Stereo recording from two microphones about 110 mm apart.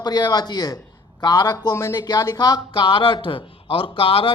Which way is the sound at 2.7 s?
50° left (ahead or behind).